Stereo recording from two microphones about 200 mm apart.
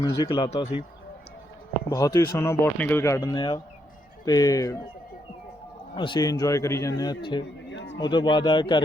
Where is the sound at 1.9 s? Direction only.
15° left (ahead or behind).